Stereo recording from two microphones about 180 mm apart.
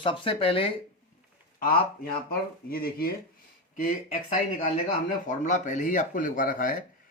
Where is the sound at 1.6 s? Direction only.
55° left (ahead or behind).